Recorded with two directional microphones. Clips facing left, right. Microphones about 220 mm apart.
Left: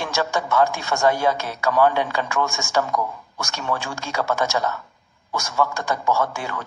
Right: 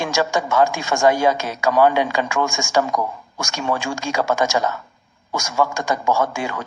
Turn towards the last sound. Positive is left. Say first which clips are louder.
# right 3 dB
turn(degrees=-15)  # may be behind; listen again after turning